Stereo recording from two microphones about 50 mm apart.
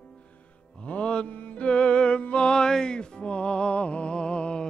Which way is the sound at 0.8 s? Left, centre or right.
Left.